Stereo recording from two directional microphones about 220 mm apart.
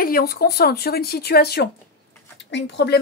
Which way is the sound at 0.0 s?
45° left (ahead or behind).